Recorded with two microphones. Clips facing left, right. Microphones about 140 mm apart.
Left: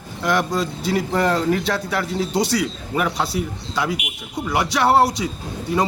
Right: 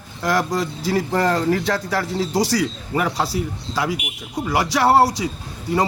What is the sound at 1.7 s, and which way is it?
Speech, 25° right (ahead or behind).